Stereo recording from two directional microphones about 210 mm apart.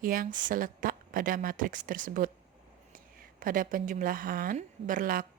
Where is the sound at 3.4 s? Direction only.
40° right (ahead or behind).